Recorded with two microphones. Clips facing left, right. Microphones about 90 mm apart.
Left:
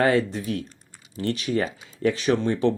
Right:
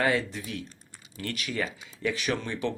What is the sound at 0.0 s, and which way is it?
Speech, 35° left (ahead or behind).